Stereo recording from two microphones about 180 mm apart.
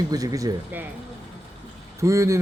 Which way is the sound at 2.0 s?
15° right (ahead or behind).